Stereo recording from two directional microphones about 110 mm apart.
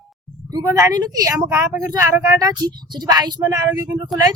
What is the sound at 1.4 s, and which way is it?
Speech, 20° right (ahead or behind).